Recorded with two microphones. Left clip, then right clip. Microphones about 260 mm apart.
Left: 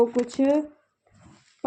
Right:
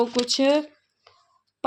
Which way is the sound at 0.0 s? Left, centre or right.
Centre.